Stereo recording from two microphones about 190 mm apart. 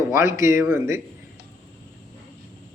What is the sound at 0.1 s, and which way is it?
Speech, 15° right (ahead or behind).